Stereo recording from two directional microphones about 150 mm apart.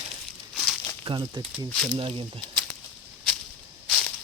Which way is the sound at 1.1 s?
35° right (ahead or behind).